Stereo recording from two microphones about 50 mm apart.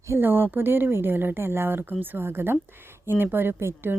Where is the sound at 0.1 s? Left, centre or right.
Right.